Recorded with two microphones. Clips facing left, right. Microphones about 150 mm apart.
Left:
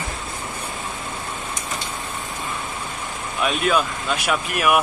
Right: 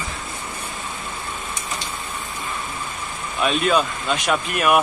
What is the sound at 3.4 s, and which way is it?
Speech, 5° left (ahead or behind).